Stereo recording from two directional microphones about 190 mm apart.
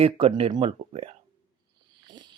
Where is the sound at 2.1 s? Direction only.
25° right (ahead or behind).